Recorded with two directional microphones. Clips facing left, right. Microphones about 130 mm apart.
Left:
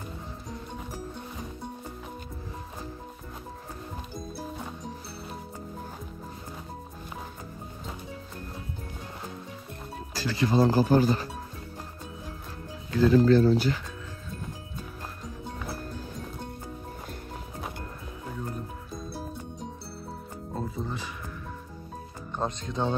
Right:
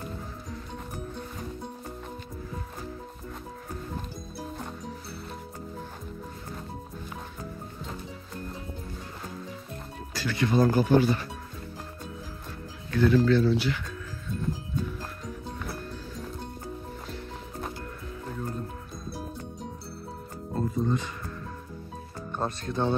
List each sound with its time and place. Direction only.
4.4 s music: centre (ahead or behind)
10.1 s speech: 30° left (ahead or behind)
12.9 s speech: 35° left (ahead or behind)
20.5 s music: centre (ahead or behind)
22.7 s speech: 15° left (ahead or behind)